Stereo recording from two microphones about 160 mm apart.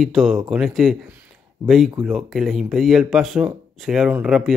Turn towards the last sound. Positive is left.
turn(degrees=-5)  # may be behind; listen again after turning